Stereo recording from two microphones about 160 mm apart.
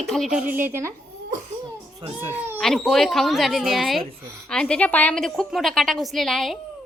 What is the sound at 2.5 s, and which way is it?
A woman's voice, centre (ahead or behind).